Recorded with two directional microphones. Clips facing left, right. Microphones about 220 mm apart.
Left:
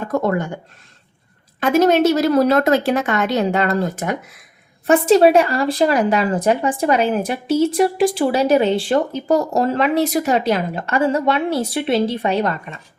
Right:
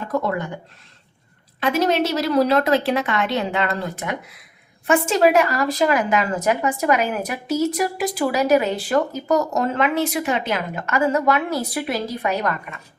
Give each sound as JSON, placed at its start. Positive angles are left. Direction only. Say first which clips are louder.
{"t": 0.1, "sound": "speech", "louder": "left 4 dB", "side_deg": 45}
{"t": 1.6, "sound": "speech", "louder": "left 6 dB", "side_deg": 45}
{"t": 4.9, "sound": "speech", "louder": "left 5 dB", "side_deg": 35}